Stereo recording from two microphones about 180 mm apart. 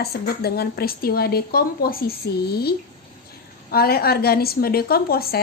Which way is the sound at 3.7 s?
60° left (ahead or behind).